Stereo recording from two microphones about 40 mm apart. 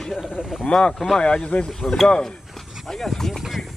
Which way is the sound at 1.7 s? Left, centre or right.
Centre.